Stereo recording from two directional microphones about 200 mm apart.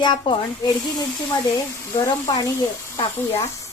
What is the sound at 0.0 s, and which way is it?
Speech, 20° left (ahead or behind).